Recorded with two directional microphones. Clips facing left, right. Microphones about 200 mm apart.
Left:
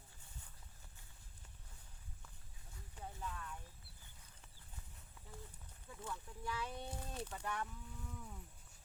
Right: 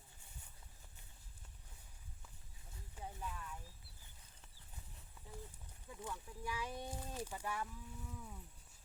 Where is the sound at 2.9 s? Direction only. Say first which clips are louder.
Even; 10° right (ahead or behind).